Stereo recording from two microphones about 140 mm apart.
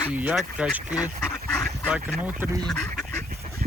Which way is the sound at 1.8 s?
5° right (ahead or behind).